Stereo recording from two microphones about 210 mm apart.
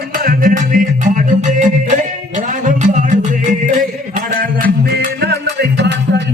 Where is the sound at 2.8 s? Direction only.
35° right (ahead or behind).